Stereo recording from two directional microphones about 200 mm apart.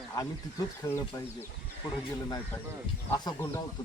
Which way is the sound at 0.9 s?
10° left (ahead or behind).